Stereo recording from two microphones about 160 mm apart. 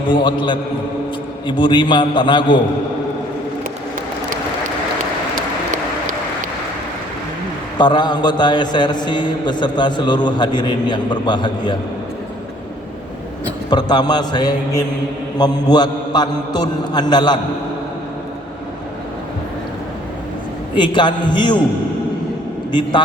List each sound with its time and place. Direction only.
0.1 s a man's voice: 30° left (ahead or behind)
7.8 s a man's voice: 30° left (ahead or behind)
13.7 s a man's voice: 25° left (ahead or behind)
20.7 s a man's voice: 30° left (ahead or behind)
22.7 s a man's voice: 30° left (ahead or behind)